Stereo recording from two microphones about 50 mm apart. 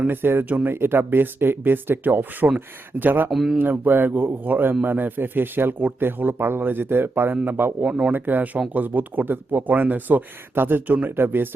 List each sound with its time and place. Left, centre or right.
0.1 s speech: right
0.4 s speech: right
0.7 s speech: right
3.2 s speech: centre
3.6 s speech: right
7.9 s speech: right
8.1 s speech: right